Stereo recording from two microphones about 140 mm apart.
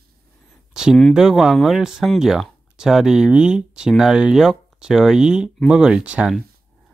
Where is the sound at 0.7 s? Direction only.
Centre (ahead or behind).